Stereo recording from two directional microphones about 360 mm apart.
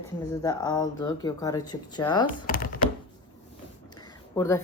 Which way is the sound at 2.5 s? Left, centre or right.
Left.